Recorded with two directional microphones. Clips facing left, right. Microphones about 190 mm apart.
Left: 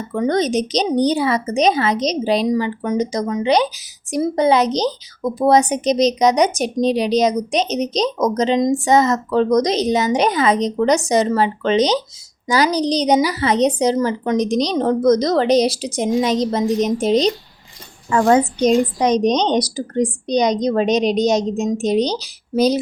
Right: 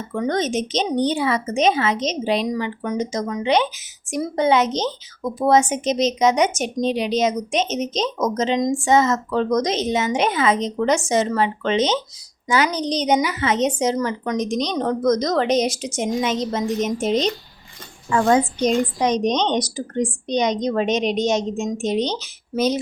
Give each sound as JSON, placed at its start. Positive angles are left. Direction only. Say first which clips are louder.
{"t": 0.1, "sound": "a woman's voice", "louder": "left 4 dB", "side_deg": 35}